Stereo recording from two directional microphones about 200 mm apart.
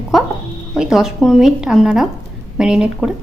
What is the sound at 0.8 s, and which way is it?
A woman's voice, centre (ahead or behind).